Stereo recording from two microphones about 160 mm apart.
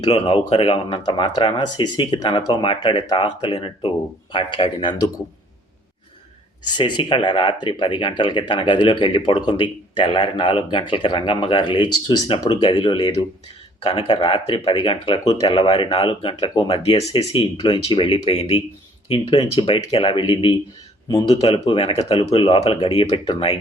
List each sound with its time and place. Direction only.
0.3 s speech: 30° left (ahead or behind)
6.7 s speech: 30° left (ahead or behind)